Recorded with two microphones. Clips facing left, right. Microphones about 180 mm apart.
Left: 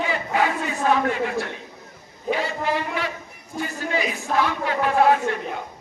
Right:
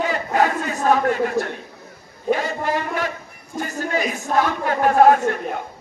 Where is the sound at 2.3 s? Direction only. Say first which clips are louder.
Right 3 dB; 45° right (ahead or behind).